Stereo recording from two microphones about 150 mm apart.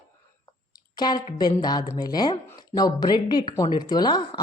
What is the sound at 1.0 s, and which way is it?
Speech, 25° left (ahead or behind).